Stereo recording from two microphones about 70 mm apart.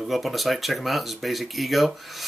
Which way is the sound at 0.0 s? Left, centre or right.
Centre.